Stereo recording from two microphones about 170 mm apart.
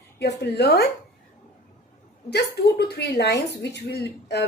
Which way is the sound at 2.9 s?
75° left (ahead or behind).